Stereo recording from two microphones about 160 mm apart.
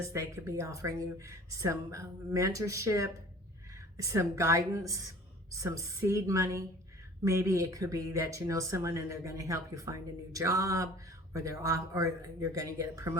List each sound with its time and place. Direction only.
0.1 s speech: 20° right (ahead or behind)